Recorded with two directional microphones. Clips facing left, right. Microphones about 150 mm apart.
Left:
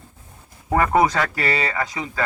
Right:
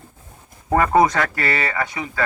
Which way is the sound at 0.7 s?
Centre (ahead or behind).